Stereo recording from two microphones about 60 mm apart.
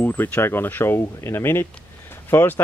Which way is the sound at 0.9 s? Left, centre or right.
Left.